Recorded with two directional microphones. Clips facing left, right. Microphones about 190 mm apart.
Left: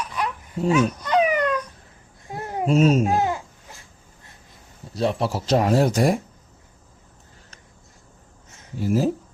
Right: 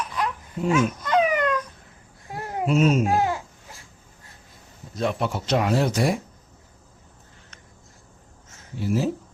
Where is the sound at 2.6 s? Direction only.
35° left (ahead or behind).